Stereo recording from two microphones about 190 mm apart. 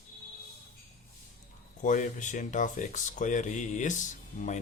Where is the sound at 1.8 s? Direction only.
40° left (ahead or behind).